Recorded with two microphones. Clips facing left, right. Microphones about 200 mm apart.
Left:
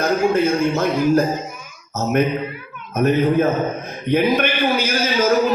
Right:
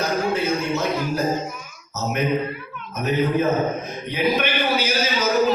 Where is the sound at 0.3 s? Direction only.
50° left (ahead or behind).